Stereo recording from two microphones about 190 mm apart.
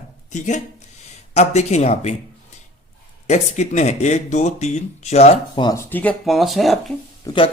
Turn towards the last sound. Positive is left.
turn(degrees=25)  # may be behind; listen again after turning